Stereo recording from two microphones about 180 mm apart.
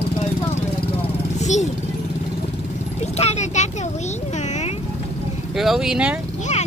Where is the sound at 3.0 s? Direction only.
35° left (ahead or behind).